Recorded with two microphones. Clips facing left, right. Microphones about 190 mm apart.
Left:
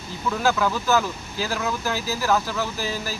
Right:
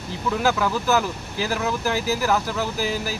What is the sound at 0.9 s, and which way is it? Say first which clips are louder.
Speech: even; 15° right (ahead or behind).